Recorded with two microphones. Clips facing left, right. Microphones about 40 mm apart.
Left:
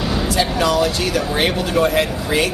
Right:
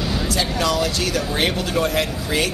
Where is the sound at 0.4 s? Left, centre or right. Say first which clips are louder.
Left 4 dB; centre.